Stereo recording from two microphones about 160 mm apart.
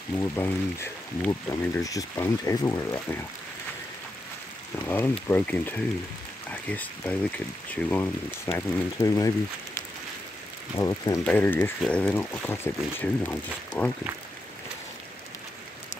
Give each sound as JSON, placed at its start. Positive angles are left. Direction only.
{"t": 0.2, "sound": "speech", "side_deg": 15}
{"t": 4.7, "sound": "speech", "side_deg": 15}
{"t": 8.5, "sound": "speech", "side_deg": 20}
{"t": 10.8, "sound": "speech", "side_deg": 20}
{"t": 11.2, "sound": "speech", "side_deg": 10}